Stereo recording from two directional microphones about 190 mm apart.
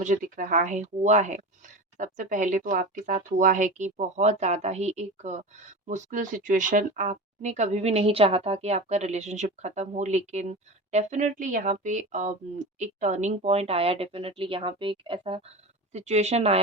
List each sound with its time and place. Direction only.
0.0 s speech: 40° right (ahead or behind)